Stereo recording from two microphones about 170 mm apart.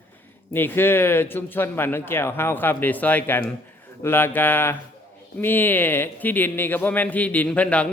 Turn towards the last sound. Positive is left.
turn(degrees=5)  # may be behind; listen again after turning